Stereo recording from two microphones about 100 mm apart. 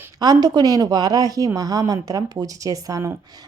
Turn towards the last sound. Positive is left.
turn(degrees=-35)  # may be behind; listen again after turning